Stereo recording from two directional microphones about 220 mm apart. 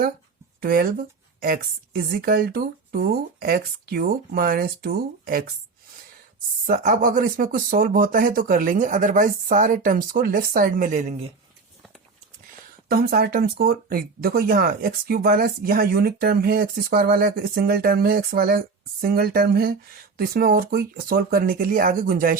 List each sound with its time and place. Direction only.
0.6 s speech: 45° right (ahead or behind)
6.7 s speech: 40° right (ahead or behind)
12.9 s speech: 45° right (ahead or behind)